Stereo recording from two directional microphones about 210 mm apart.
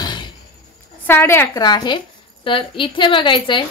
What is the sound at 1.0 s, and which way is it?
Speech, 10° left (ahead or behind).